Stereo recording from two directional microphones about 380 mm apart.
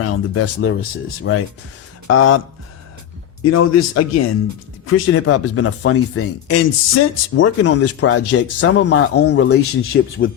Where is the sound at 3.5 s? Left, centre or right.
Left.